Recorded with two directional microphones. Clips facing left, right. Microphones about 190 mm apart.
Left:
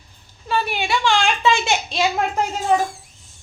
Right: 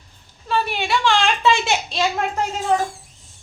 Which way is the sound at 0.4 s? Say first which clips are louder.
Even; centre (ahead or behind).